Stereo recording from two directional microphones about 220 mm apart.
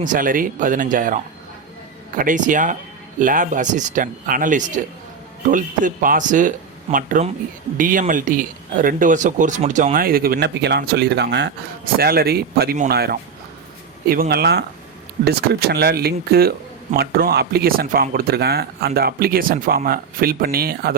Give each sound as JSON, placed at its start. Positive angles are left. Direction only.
{"t": 0.0, "sound": "speech", "side_deg": -40}